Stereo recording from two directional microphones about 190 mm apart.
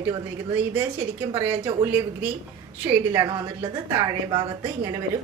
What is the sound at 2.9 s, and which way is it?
A woman's voice, 15° right (ahead or behind).